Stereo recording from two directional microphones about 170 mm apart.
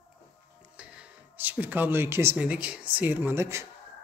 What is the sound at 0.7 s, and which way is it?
Speech, 5° right (ahead or behind).